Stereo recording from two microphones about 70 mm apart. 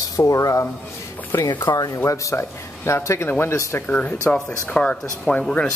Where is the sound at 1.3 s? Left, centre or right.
Left.